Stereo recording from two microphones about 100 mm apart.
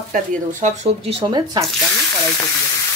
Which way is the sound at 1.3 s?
45° right (ahead or behind).